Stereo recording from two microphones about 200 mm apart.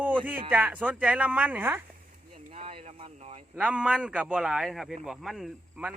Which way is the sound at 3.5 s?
5° right (ahead or behind).